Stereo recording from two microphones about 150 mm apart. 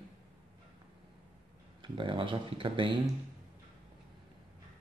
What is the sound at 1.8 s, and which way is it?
A man's voice, 35° right (ahead or behind).